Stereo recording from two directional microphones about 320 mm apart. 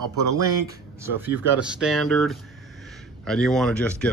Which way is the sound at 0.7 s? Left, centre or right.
Centre.